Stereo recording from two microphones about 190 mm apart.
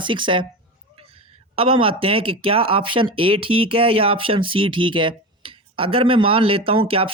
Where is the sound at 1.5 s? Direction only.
30° right (ahead or behind).